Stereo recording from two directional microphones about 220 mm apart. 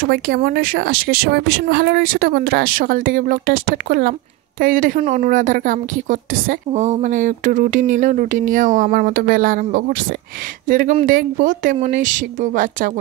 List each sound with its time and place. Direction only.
0.0 s a woman's voice: 45° right (ahead or behind)